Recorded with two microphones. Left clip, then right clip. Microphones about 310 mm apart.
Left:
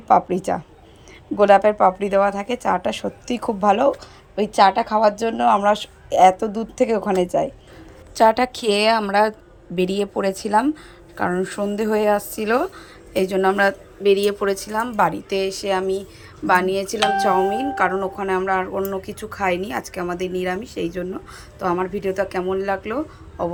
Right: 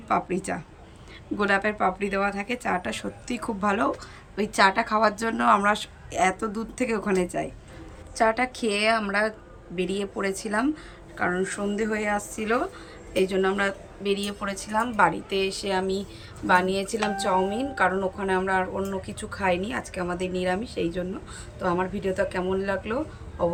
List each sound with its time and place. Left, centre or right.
0.1 s a woman's voice: centre